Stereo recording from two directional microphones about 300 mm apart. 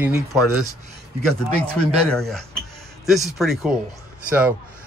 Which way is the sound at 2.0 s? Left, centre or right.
Centre.